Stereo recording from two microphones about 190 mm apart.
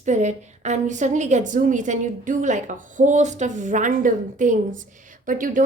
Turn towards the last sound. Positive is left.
turn(degrees=-45)  # may be behind; listen again after turning